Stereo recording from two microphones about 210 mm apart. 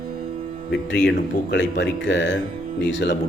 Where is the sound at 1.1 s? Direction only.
55° left (ahead or behind).